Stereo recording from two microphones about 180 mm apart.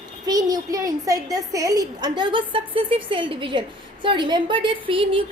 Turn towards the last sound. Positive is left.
turn(degrees=-30)  # may be behind; listen again after turning